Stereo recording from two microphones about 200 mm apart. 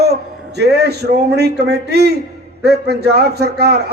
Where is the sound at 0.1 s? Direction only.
55° right (ahead or behind).